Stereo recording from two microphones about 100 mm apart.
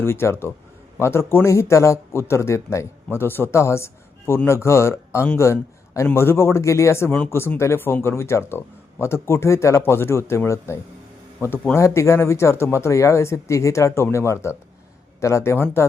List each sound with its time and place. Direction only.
0.0 s a man's voice: 25° left (ahead or behind)